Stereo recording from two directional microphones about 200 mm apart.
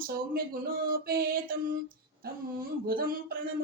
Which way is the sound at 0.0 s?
45° right (ahead or behind).